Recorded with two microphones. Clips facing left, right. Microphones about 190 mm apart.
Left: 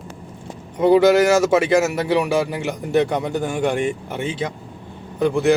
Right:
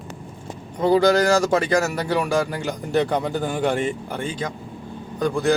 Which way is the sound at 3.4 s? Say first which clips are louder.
Left 2 dB; centre (ahead or behind).